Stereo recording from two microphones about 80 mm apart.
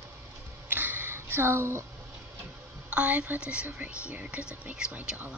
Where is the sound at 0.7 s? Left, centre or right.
Right.